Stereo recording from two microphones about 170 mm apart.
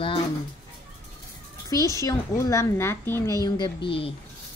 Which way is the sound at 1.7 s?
20° left (ahead or behind).